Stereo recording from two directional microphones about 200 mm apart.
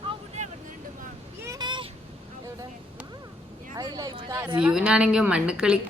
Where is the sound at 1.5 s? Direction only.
20° right (ahead or behind).